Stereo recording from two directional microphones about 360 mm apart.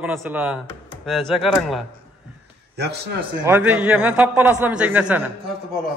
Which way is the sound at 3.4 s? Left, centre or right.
Centre.